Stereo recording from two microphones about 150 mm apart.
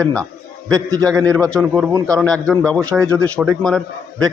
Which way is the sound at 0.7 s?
25° right (ahead or behind).